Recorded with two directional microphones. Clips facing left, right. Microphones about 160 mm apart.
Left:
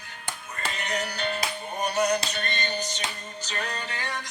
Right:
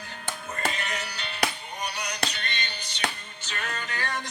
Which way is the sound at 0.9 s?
45° left (ahead or behind).